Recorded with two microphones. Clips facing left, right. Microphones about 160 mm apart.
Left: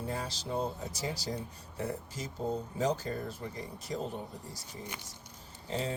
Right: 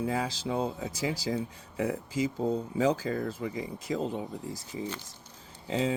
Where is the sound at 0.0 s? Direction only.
90° right.